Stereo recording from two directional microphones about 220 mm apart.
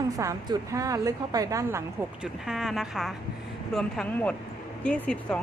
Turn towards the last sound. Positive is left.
turn(degrees=5)  # may be behind; listen again after turning